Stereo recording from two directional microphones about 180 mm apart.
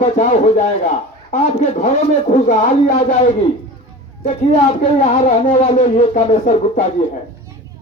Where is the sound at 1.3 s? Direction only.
40° left (ahead or behind).